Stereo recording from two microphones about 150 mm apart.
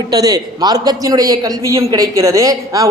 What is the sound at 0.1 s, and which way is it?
A man's voice, 25° right (ahead or behind).